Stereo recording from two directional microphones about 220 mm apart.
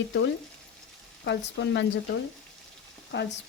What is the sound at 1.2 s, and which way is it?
Speech, 55° left (ahead or behind).